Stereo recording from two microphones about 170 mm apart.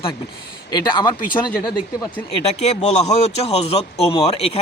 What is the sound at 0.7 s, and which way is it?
Speech, 25° left (ahead or behind).